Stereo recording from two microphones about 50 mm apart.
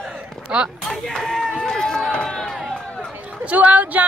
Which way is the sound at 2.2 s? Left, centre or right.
Centre.